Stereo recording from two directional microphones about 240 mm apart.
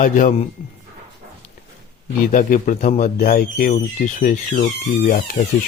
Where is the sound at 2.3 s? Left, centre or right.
Left.